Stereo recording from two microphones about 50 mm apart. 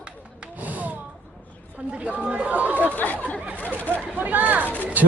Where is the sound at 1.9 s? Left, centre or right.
Right.